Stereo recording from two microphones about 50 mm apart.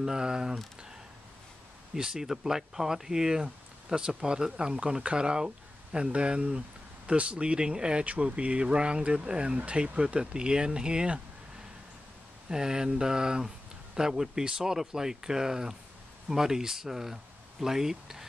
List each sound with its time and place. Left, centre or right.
0.0 s speech: centre
2.0 s speech: centre
12.4 s speech: centre